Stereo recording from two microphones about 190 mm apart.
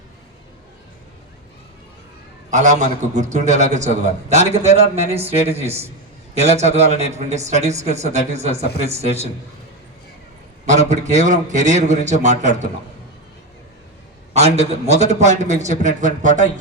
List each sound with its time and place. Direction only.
2.5 s a man's voice: 40° right (ahead or behind)
10.7 s a man's voice: 40° right (ahead or behind)
14.3 s a man's voice: 35° right (ahead or behind)